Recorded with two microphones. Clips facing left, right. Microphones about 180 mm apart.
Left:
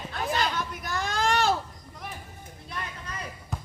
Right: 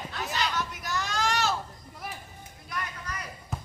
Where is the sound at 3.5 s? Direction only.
Centre (ahead or behind).